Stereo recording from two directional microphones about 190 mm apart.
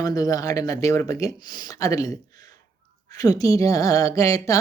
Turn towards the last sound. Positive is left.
turn(degrees=15)  # may be behind; listen again after turning